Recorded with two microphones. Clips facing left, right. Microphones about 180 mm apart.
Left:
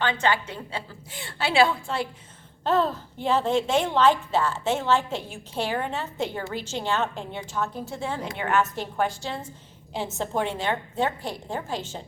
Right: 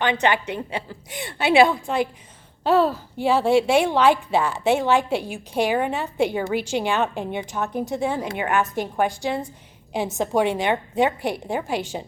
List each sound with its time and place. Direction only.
0.0 s a woman's voice: 15° right (ahead or behind)